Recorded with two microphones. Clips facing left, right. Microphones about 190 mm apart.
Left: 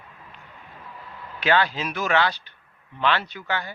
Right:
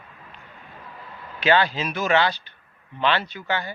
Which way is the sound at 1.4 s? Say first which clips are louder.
Right 2 dB; 15° right (ahead or behind).